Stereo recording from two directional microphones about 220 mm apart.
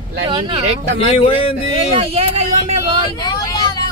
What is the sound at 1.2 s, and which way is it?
Speech, 25° left (ahead or behind).